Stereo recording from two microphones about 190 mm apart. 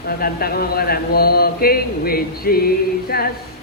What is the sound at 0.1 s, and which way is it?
A man's voice, 55° left (ahead or behind).